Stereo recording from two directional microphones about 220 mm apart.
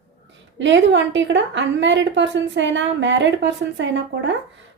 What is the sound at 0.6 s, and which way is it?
A woman's voice, 55° right (ahead or behind).